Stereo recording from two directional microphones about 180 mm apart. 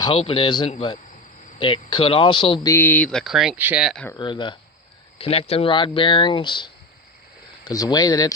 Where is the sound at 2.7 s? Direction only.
10° left (ahead or behind); by 3.8 s 10° right (ahead or behind).